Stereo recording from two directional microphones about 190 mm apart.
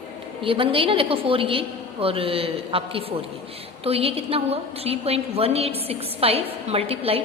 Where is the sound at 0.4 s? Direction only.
30° right (ahead or behind).